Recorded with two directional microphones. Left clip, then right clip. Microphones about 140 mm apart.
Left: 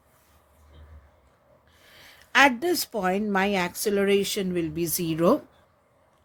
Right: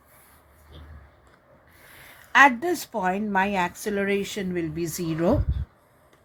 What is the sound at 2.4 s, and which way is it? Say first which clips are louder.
A woman's voice: right 2 dB; 65° left (ahead or behind).